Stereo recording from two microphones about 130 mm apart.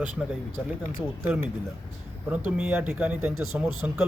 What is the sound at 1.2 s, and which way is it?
Speech, 15° right (ahead or behind).